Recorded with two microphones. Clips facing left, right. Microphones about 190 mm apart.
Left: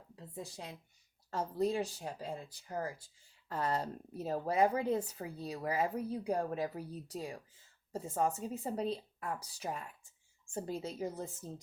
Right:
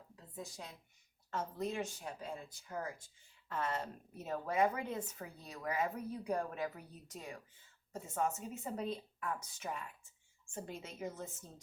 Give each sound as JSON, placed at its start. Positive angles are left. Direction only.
{"t": 1.3, "sound": "a woman's voice", "side_deg": 35}